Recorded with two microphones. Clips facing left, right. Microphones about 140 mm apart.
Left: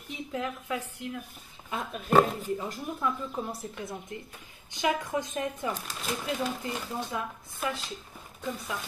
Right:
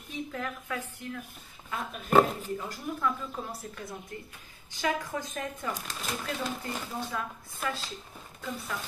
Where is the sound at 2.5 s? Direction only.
20° left (ahead or behind).